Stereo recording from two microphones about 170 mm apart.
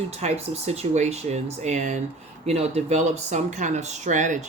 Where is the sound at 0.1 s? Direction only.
40° right (ahead or behind).